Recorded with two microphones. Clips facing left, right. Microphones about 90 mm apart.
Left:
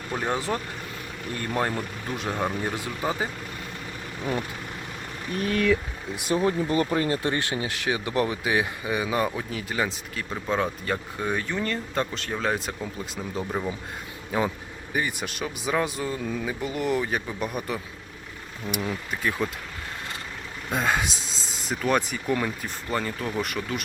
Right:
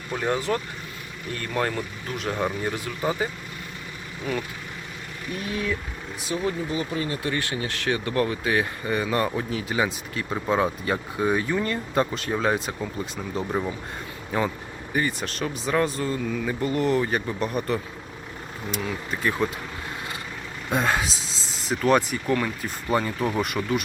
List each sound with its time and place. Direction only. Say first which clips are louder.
0.1 s speech: right 2 dB; 15° left (ahead or behind)
5.3 s speech: left 5 dB; 45° left (ahead or behind)
7.2 s speech: left 1 dB; 25° left (ahead or behind); by 13.7 s 5° right (ahead or behind)
14.3 s speech: even; 5° left (ahead or behind)
19.1 s speech: right 3 dB; centre (ahead or behind)
20.7 s speech: right 1 dB; centre (ahead or behind)
22.9 s speech: right 5 dB; 10° right (ahead or behind)